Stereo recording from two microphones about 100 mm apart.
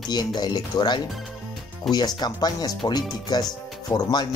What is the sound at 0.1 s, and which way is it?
Speech, 45° left (ahead or behind).